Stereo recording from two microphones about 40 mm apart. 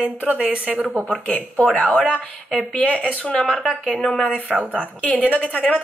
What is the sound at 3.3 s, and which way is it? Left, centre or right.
Speech, centre.